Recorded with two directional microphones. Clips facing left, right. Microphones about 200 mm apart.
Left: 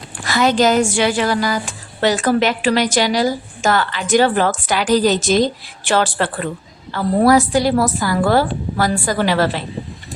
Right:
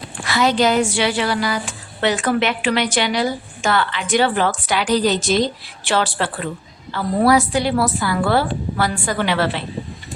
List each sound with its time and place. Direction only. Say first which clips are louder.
0.3 s a woman's voice: left 2 dB; 45° left (ahead or behind)